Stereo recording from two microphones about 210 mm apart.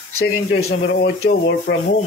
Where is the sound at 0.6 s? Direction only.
60° left (ahead or behind).